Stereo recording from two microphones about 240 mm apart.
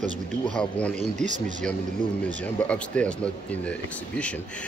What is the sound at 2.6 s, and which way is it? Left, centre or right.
Speech, centre.